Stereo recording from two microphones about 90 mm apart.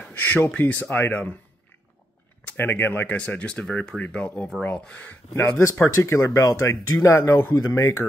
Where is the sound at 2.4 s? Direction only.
25° left (ahead or behind).